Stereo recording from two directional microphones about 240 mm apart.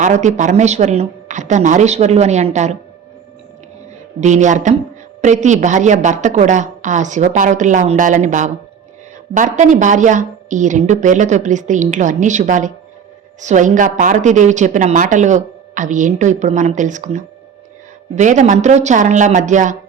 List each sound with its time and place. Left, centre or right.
0.0 s speech: right
4.2 s a woman's voice: right